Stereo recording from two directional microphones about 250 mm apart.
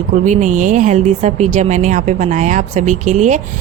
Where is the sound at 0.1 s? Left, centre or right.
Right.